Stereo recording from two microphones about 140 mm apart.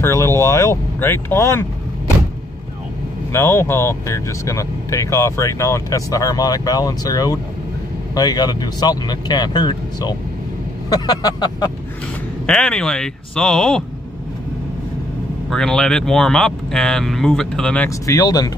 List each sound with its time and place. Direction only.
0.0 s speech: 20° left (ahead or behind)
3.3 s speech: 20° left (ahead or behind)
12.4 s speech: 5° left (ahead or behind)
15.5 s speech: 5° left (ahead or behind)
17.8 s speech: 25° left (ahead or behind)